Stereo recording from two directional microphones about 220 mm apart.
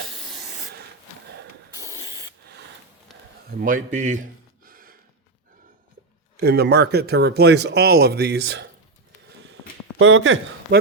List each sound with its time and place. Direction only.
0.2 s rub: centre (ahead or behind)
2.0 s spray: 15° left (ahead or behind)
3.6 s a man's voice: 35° right (ahead or behind)
6.3 s speech: 45° right (ahead or behind)
10.0 s a man's voice: 60° right (ahead or behind)